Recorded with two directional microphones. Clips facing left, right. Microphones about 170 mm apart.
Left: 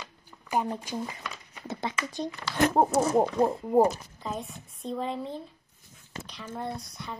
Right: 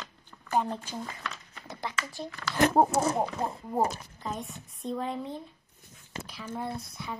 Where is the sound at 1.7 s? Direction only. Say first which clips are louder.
Left 5 dB; 25° left (ahead or behind).